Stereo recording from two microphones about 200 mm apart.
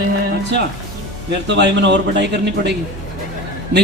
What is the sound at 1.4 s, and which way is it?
A man's voice, 60° right (ahead or behind).